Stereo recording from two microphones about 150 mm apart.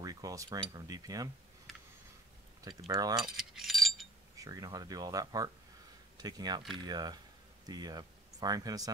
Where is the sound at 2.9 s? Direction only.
25° right (ahead or behind).